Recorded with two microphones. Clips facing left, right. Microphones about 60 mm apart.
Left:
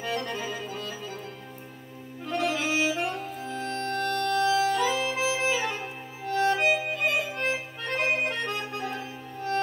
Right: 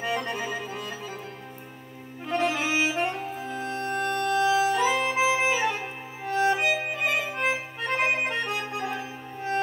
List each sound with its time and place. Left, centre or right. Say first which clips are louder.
0.0 s music: right 2 dB; centre
2.2 s music: right 2 dB; right
7.3 s accordion: right 2 dB; centre